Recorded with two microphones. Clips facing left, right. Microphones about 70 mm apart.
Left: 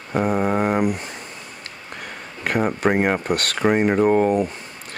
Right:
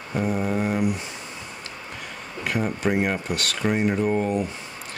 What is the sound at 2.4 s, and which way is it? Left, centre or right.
Speech, left.